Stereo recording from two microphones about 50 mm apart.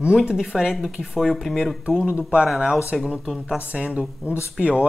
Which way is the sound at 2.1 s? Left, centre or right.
Right.